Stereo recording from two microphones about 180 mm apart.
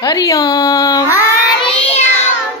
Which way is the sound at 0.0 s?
20° left (ahead or behind).